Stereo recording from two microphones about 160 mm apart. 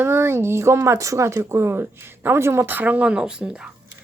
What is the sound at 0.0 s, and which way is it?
Speech, 15° right (ahead or behind).